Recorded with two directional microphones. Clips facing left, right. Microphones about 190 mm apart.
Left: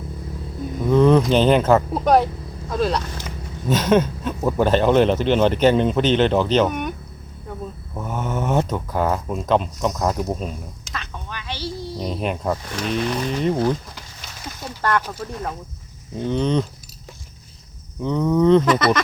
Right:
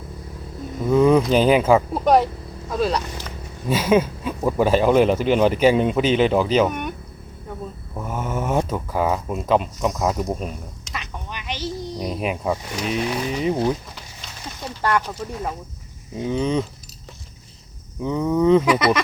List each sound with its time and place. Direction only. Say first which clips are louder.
0.8 s a man's voice: left 1 dB; 5° right (ahead or behind)
8.0 s speech: left 1 dB; 5° right (ahead or behind)
10.9 s a sound: even; 15° right (ahead or behind)
11.9 s speech: left 1 dB; 5° right (ahead or behind)
14.8 s a man's voice: even; 10° right (ahead or behind)
18.0 s speech: left 1 dB; 5° right (ahead or behind)